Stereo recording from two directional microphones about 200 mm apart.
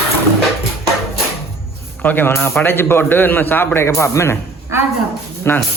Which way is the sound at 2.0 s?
10° left (ahead or behind).